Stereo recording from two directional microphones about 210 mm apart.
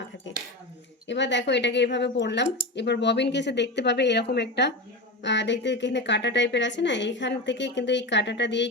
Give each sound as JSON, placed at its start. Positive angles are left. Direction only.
{"t": 1.0, "sound": "speech", "side_deg": 55}